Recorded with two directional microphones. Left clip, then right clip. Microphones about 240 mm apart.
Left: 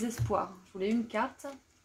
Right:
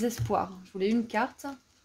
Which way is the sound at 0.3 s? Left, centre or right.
Right.